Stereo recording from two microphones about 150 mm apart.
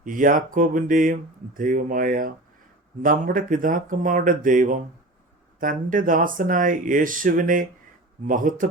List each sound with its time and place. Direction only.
0.0 s speech: 65° right (ahead or behind)